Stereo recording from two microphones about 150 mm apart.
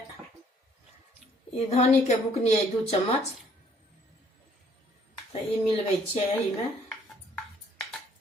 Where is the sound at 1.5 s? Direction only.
45° left (ahead or behind).